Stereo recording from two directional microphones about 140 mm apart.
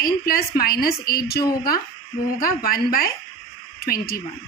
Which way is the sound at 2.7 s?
90° left.